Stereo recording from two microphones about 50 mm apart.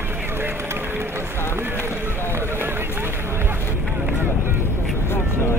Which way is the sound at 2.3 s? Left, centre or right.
Right.